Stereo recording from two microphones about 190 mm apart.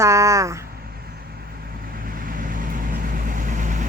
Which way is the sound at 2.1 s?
45° right (ahead or behind).